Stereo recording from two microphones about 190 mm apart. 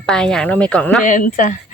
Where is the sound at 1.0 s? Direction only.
45° left (ahead or behind).